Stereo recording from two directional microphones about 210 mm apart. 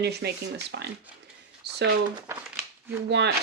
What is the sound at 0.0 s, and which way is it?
Speech, 50° right (ahead or behind).